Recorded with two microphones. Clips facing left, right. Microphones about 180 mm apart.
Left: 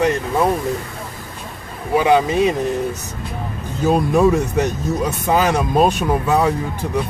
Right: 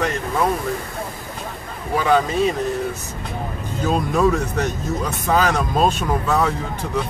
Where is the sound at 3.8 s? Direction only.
15° left (ahead or behind).